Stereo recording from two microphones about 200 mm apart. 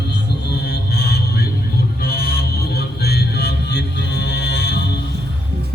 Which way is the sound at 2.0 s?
50° left (ahead or behind).